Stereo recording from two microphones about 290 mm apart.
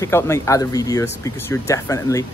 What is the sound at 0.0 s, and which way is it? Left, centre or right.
Speech, centre.